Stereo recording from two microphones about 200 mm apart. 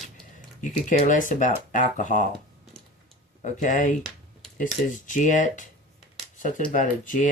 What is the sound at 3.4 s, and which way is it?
Speech, 40° left (ahead or behind).